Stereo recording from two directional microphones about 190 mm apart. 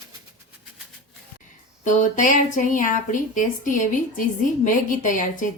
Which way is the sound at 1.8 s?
40° left (ahead or behind).